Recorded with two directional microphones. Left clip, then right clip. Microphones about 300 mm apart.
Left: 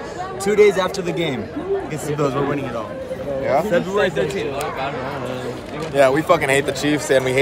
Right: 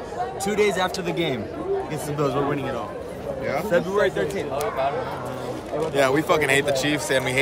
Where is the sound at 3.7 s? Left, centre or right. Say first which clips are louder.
Left 2 dB; centre.